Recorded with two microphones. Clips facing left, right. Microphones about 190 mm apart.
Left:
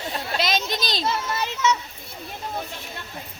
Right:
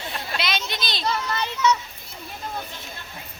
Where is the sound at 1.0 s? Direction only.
5° left (ahead or behind).